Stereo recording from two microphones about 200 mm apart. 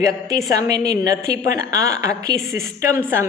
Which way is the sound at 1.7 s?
15° right (ahead or behind).